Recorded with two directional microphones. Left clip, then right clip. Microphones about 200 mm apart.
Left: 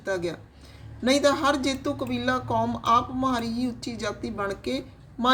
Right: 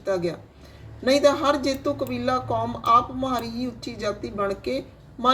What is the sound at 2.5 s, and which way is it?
Speech, 15° left (ahead or behind).